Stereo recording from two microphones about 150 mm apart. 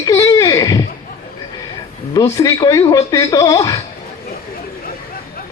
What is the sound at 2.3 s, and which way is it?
Speech, 25° left (ahead or behind).